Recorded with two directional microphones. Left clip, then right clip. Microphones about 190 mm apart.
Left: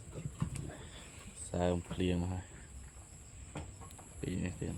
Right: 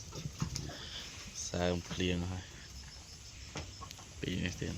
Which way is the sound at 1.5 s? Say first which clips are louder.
Left 1 dB; 15° left (ahead or behind).